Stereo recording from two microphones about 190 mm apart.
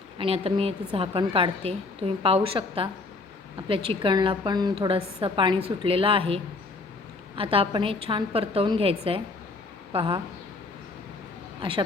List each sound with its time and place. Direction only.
0.2 s a woman's voice: 30° right (ahead or behind)